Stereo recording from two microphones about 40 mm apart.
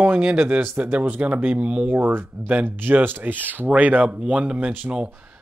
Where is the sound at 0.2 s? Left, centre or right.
Right.